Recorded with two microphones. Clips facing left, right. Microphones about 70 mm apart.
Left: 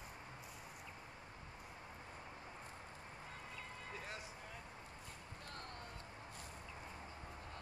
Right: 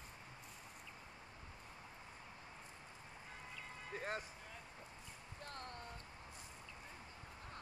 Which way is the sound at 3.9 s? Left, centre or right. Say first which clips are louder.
Right 7 dB; right.